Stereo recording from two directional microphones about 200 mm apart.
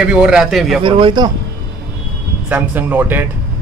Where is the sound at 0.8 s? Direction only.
25° right (ahead or behind).